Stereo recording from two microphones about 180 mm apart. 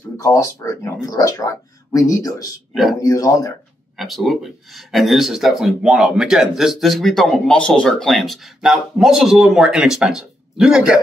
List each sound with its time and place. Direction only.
0.2 s speech: 20° left (ahead or behind)
2.7 s speech: centre (ahead or behind)
3.0 s speech: 20° left (ahead or behind)
4.0 s a man's voice: centre (ahead or behind)